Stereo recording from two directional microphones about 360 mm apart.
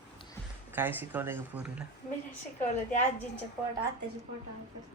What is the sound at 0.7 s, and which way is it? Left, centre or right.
Speech, centre.